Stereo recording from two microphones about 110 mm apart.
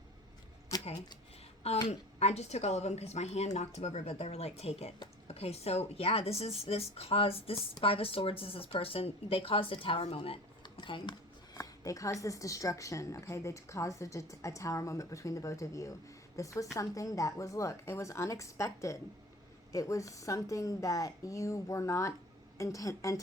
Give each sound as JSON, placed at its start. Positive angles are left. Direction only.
{"t": 1.9, "sound": "a woman's voice", "side_deg": 80}
{"t": 10.2, "sound": "typing", "side_deg": 45}
{"t": 11.5, "sound": "a woman's voice", "side_deg": 30}